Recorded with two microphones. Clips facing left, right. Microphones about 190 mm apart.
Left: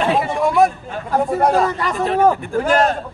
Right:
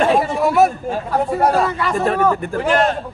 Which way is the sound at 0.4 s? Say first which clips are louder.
Left 1 dB; 5° right (ahead or behind).